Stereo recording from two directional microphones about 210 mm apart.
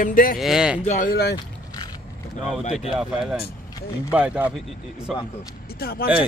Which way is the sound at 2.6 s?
30° left (ahead or behind).